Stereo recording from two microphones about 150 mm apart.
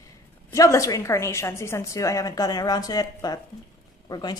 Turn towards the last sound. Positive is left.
turn(degrees=25)  # may be behind; listen again after turning